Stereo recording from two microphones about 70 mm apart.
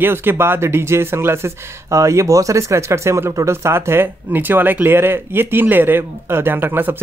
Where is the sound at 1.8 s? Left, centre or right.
Right.